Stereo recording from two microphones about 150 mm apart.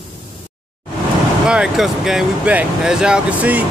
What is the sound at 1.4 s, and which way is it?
Speech, 5° right (ahead or behind).